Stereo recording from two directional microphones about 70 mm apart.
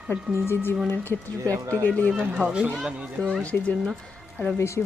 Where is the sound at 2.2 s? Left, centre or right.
Centre.